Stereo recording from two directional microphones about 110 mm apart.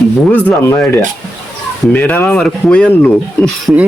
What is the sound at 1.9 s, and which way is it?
Speech, 10° left (ahead or behind).